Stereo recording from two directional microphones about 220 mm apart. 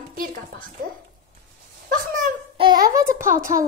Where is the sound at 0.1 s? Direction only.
40° right (ahead or behind).